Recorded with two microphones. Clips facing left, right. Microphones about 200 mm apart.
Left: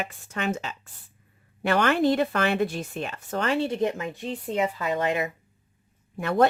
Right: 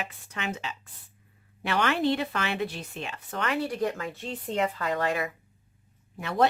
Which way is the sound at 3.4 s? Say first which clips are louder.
Left 3 dB; 25° left (ahead or behind).